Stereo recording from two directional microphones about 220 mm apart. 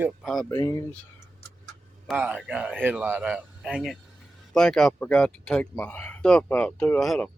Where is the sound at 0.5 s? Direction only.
15° left (ahead or behind).